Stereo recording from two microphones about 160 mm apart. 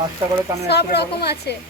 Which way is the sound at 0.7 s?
90° left.